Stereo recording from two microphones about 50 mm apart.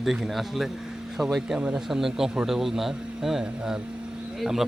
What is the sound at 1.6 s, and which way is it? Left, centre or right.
Speech, right.